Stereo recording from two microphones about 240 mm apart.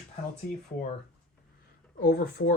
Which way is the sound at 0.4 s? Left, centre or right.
Left.